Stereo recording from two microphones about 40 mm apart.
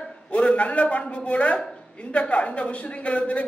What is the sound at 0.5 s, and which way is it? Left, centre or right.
A man's voice, left.